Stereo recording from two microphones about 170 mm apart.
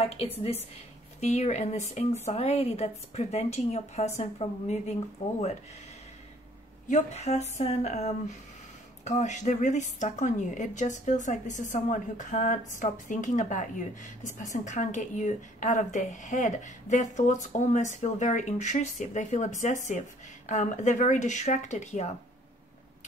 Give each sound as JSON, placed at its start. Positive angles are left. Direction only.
{"t": 1.2, "sound": "a woman's voice", "side_deg": 40}
{"t": 6.9, "sound": "a woman's voice", "side_deg": 40}